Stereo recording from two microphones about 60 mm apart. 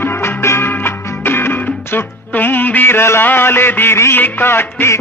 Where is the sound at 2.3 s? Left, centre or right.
Left.